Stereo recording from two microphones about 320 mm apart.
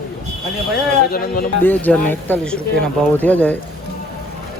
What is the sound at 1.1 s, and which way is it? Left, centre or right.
Speech, left.